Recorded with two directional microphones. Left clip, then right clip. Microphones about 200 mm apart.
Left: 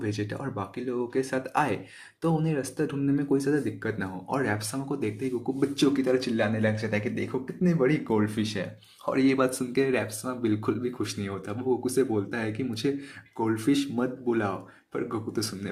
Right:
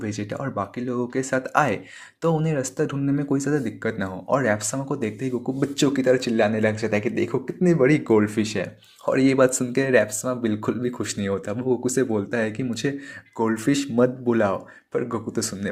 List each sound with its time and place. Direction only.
0.0 s speech: 30° right (ahead or behind)